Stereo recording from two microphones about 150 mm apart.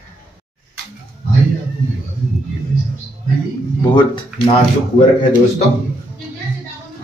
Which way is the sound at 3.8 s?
30° left (ahead or behind).